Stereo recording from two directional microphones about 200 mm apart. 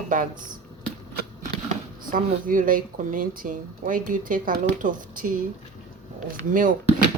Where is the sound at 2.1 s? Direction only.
45° right (ahead or behind).